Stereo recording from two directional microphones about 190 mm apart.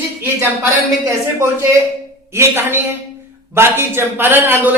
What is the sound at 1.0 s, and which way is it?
Speech, 15° right (ahead or behind).